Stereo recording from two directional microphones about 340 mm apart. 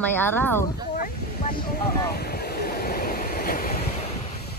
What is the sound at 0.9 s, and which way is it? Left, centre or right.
Vehicle, left.